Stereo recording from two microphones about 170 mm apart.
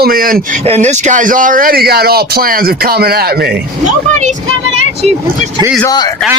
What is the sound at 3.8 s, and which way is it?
Speech, 45° right (ahead or behind).